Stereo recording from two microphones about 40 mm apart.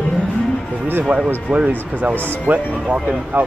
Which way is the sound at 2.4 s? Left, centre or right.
Right.